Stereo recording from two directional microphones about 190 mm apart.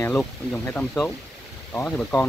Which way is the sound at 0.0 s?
10° left (ahead or behind).